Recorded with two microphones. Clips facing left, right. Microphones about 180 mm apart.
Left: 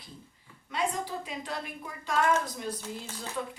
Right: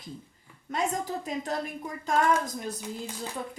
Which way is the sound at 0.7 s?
45° right (ahead or behind).